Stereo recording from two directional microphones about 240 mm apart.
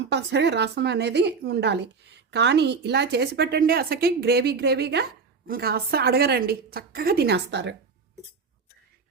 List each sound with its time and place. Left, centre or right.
0.1 s a woman's voice: right